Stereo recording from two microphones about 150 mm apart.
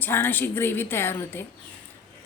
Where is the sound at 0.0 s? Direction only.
15° left (ahead or behind).